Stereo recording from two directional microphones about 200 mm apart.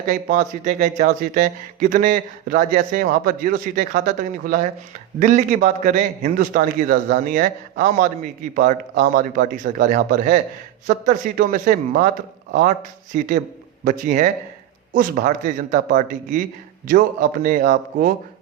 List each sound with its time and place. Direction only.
0.1 s a man's voice: 40° right (ahead or behind)